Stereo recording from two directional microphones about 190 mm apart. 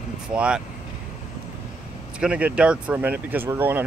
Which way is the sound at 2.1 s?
5° right (ahead or behind).